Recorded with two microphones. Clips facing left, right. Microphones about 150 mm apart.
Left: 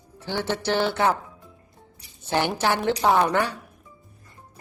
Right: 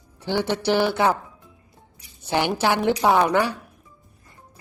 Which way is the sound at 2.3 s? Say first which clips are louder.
Right 2 dB; 15° right (ahead or behind).